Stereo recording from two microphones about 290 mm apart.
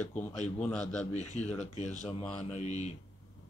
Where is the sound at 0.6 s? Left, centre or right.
Centre.